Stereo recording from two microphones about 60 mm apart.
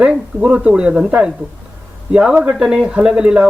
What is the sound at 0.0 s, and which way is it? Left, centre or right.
Speech, centre.